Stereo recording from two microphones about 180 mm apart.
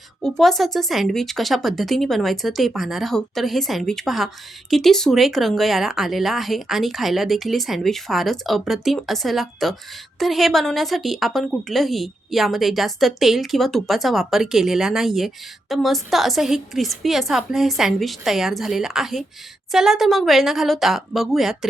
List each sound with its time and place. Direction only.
0.2 s a woman's voice: centre (ahead or behind)